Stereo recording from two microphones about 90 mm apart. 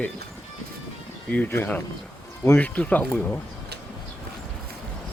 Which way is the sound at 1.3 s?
15° left (ahead or behind).